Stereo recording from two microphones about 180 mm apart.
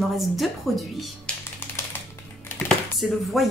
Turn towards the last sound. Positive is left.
turn(degrees=0)  # may be behind; listen again after turning